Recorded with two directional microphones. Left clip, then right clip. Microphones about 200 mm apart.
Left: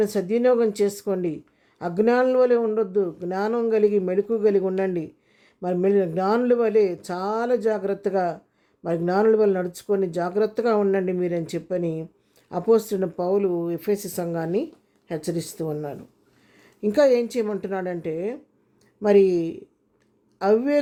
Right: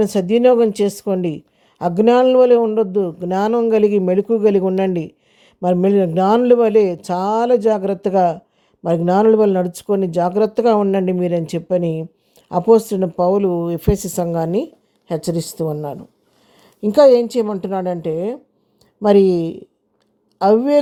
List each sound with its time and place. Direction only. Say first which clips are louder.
0.0 s a man's voice: right 7 dB; 30° right (ahead or behind)